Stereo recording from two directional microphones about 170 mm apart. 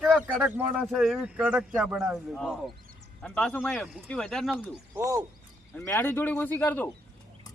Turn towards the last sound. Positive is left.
turn(degrees=10)  # may be behind; listen again after turning